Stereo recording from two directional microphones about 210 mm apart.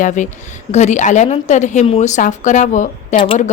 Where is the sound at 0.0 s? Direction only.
35° left (ahead or behind).